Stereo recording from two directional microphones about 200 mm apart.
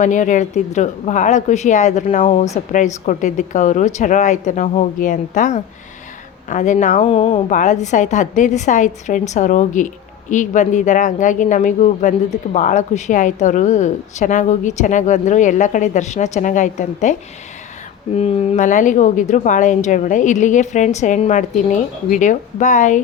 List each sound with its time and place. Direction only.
0.0 s a woman's voice: 40° left (ahead or behind)
7.1 s speech: 25° left (ahead or behind)
7.5 s a woman's voice: 35° left (ahead or behind)